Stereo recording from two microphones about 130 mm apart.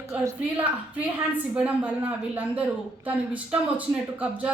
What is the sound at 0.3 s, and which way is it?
A woman's voice, 10° right (ahead or behind).